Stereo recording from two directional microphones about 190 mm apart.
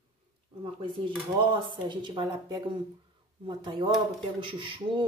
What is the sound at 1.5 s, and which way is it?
A woman's voice, 25° right (ahead or behind).